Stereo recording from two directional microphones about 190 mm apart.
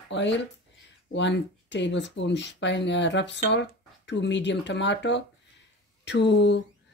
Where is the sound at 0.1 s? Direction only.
70° left (ahead or behind).